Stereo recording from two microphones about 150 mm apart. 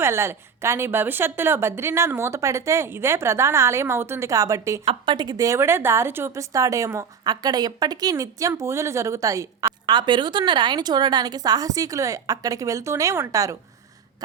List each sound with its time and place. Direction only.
0.0 s a woman's voice: 15° right (ahead or behind)
4.9 s a woman's voice: 30° right (ahead or behind)